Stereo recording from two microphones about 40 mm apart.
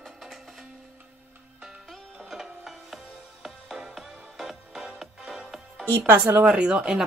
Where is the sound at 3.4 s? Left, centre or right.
Centre.